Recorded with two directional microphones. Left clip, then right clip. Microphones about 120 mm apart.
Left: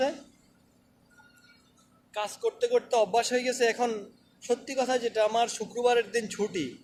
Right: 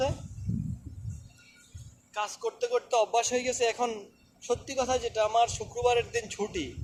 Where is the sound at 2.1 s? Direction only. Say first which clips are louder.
Left 2 dB; 25° left (ahead or behind).